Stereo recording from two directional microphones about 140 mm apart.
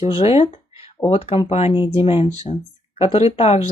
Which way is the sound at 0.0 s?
45° left (ahead or behind).